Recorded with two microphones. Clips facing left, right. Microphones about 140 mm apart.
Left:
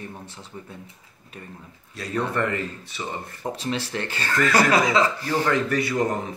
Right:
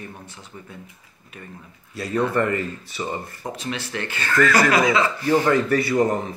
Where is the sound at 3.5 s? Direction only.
35° left (ahead or behind).